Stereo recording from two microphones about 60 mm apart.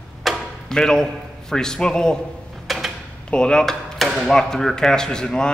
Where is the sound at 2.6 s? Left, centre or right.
Centre.